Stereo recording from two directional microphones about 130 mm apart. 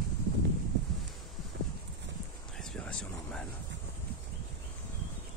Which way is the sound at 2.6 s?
5° left (ahead or behind).